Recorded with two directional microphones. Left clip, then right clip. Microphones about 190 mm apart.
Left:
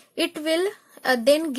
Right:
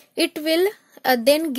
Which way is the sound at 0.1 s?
30° right (ahead or behind).